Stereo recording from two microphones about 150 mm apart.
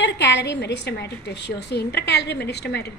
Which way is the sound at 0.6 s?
90° left.